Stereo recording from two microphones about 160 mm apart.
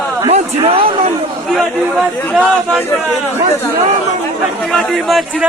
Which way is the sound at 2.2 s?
10° left (ahead or behind).